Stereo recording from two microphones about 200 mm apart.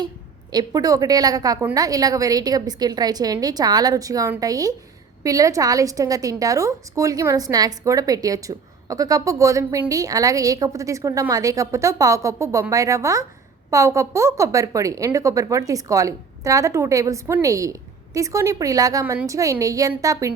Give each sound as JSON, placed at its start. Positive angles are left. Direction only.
{"t": 0.5, "sound": "a woman's voice", "side_deg": -20}